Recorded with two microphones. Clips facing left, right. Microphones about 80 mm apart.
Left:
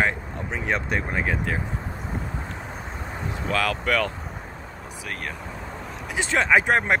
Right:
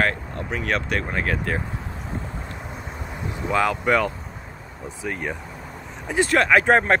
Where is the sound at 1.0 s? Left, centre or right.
Centre.